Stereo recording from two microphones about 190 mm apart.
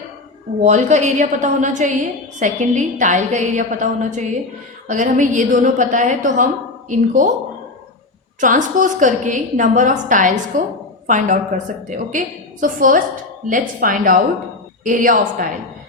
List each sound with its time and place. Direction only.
0.6 s a woman's voice: 40° right (ahead or behind)
8.4 s a woman's voice: 40° right (ahead or behind)